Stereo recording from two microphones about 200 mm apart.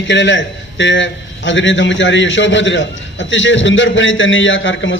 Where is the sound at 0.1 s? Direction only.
65° left (ahead or behind).